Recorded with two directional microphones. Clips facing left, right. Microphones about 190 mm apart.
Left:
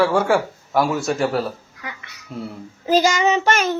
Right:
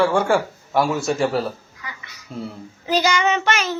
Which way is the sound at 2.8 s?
45° left (ahead or behind).